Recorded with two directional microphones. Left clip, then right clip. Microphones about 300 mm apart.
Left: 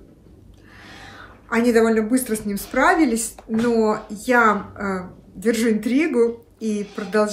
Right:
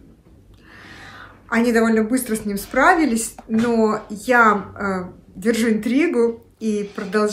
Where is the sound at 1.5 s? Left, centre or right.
Centre.